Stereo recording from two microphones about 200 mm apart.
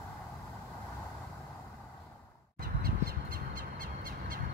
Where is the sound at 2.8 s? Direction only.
45° right (ahead or behind).